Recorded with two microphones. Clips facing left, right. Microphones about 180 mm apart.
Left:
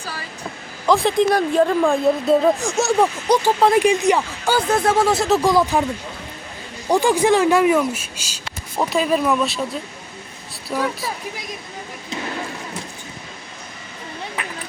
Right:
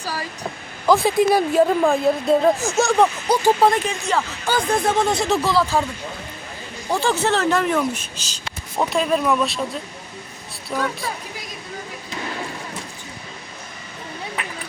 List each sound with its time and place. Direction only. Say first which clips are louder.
0.9 s speech: even; centre (ahead or behind)
3.8 s speech: left 7 dB; 15° left (ahead or behind)
5.4 s speech: left 3 dB; 15° left (ahead or behind)
6.9 s speech: left 5 dB; 15° left (ahead or behind)
10.7 s speech: left 2 dB; 5° left (ahead or behind)